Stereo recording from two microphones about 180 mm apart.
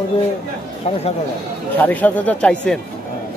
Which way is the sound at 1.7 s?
10° left (ahead or behind).